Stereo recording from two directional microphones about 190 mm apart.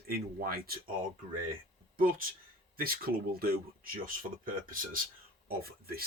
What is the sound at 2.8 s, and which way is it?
Speech, 50° right (ahead or behind).